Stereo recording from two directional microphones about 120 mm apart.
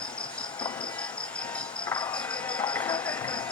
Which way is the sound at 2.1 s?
10° left (ahead or behind).